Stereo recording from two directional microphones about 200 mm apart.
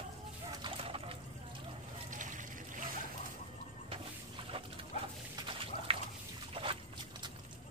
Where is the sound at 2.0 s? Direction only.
40° right (ahead or behind).